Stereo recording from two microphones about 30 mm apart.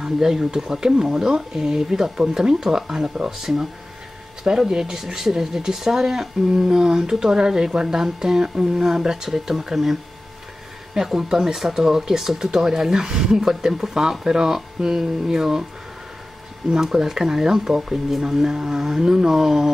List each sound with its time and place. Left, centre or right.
0.0 s speech: centre
3.3 s speech: centre
11.0 s speech: centre
16.7 s speech: centre